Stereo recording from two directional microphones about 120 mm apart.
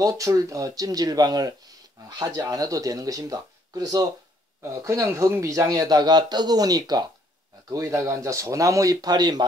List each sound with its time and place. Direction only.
0.0 s speech: 25° right (ahead or behind)